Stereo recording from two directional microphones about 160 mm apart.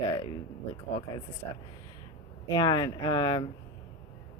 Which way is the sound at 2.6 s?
25° left (ahead or behind).